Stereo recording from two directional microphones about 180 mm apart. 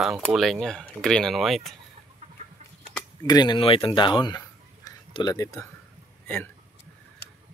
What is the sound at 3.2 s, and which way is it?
Speech, 20° left (ahead or behind).